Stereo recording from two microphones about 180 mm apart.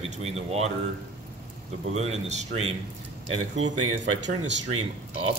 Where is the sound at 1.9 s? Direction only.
35° right (ahead or behind).